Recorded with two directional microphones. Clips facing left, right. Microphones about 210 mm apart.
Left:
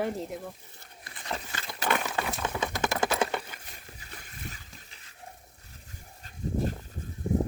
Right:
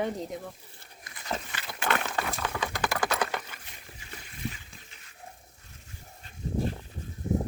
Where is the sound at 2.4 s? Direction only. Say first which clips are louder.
Left 1 dB; 20° left (ahead or behind).